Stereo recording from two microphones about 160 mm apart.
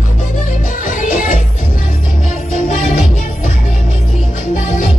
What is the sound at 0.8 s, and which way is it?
Music, 55° left (ahead or behind).